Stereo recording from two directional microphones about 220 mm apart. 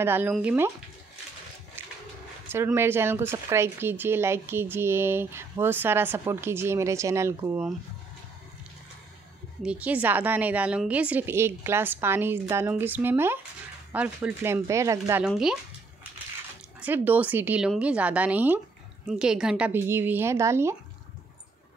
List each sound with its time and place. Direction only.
0.0 s speech: 10° right (ahead or behind)
1.8 s a sound: 10° right (ahead or behind)
2.4 s speech: 10° right (ahead or behind)
9.6 s speech: 5° right (ahead or behind)
15.2 s speech: centre (ahead or behind)
16.8 s speech: 10° right (ahead or behind)